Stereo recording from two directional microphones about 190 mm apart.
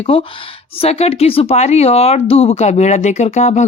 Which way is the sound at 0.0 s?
30° left (ahead or behind).